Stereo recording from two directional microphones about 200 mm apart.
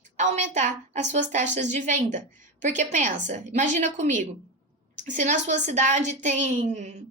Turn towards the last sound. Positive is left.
turn(degrees=-35)  # may be behind; listen again after turning